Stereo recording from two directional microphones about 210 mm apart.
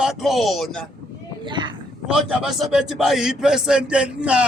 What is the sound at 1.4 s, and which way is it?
Speech, 20° right (ahead or behind).